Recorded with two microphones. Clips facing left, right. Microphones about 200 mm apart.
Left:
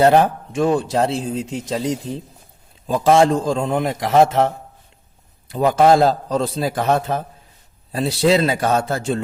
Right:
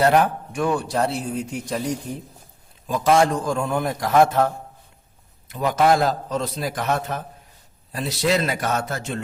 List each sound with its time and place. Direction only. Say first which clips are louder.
0.0 s speech: left 4 dB; 30° left (ahead or behind)